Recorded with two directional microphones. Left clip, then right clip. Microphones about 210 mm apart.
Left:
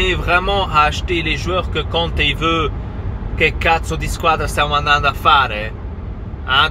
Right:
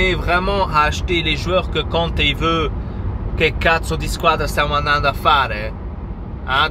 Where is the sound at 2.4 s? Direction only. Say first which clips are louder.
Left 1 dB; 15° right (ahead or behind).